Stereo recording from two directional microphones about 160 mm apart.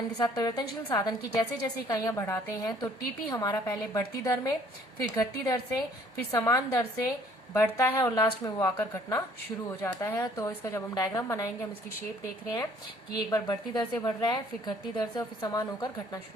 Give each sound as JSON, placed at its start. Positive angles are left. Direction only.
{"t": 0.2, "sound": "a woman's voice", "side_deg": 25}
{"t": 13.1, "sound": "a woman's voice", "side_deg": 25}